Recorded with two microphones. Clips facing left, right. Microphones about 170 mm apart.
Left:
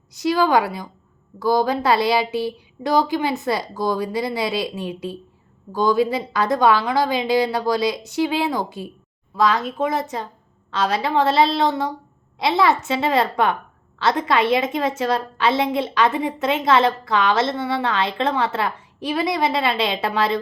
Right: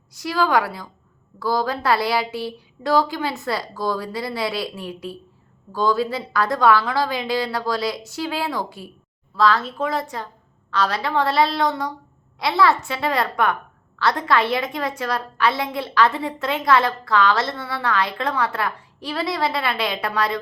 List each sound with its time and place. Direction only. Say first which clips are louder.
0.1 s a woman's voice: left 3 dB; 20° left (ahead or behind)